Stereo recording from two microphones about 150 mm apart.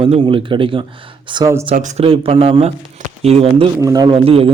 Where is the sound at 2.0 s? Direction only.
40° right (ahead or behind).